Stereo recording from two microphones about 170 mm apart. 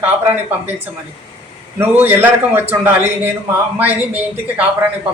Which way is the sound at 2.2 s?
10° right (ahead or behind).